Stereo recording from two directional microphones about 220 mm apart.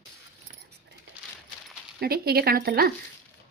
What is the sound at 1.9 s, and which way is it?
Speech, 45° right (ahead or behind).